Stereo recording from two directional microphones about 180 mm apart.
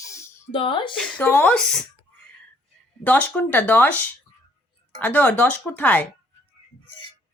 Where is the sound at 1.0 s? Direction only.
10° left (ahead or behind).